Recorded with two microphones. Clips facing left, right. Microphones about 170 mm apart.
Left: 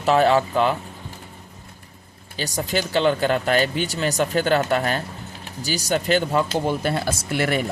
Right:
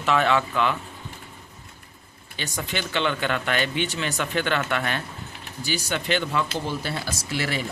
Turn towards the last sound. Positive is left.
turn(degrees=50)  # may be behind; listen again after turning